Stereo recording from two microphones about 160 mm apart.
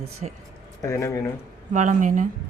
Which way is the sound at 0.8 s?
20° left (ahead or behind).